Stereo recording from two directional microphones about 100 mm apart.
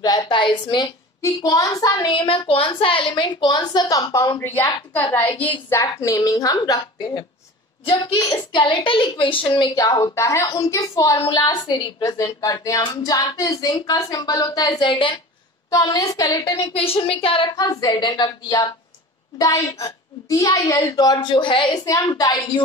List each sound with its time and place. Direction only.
0.0 s a woman's voice: 40° left (ahead or behind)
1.4 s a woman's voice: 35° left (ahead or behind)
2.0 s a woman's voice: 60° left (ahead or behind); by 4.4 s 40° left (ahead or behind)
4.4 s a woman's voice: 20° left (ahead or behind)
5.8 s a woman's voice: 35° left (ahead or behind); by 9.7 s 55° left (ahead or behind)
9.8 s a woman's voice: 40° left (ahead or behind)
11.2 s a woman's voice: 45° left (ahead or behind)
12.0 s a woman's voice: 35° left (ahead or behind); by 15.1 s 55° left (ahead or behind)
15.7 s a woman's voice: 35° left (ahead or behind)
16.7 s a woman's voice: 70° left (ahead or behind)
17.6 s a woman's voice: 40° left (ahead or behind); by 21.8 s 55° left (ahead or behind)
21.8 s a woman's voice: 35° left (ahead or behind)